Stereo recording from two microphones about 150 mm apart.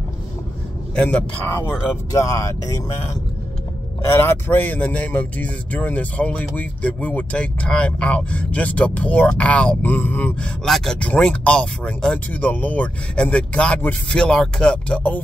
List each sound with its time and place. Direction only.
0.9 s speech: 10° left (ahead or behind)
2.1 s speech: 20° left (ahead or behind)
4.1 s speech: 15° left (ahead or behind)